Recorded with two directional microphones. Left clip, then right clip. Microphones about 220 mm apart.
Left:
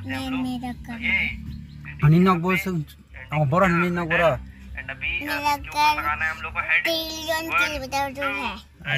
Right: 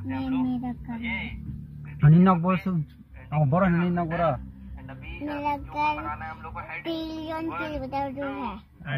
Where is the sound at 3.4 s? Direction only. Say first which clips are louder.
Left 4 dB; 35° left (ahead or behind).